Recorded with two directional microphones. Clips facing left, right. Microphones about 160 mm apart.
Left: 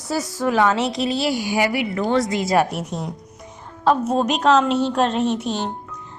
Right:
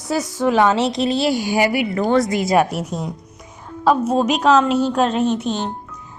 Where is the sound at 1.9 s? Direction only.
50° right (ahead or behind).